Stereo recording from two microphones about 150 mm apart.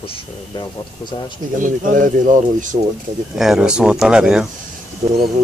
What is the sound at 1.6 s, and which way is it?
Speech, 60° right (ahead or behind).